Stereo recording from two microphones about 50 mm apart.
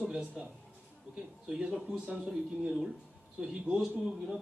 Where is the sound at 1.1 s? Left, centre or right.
Right.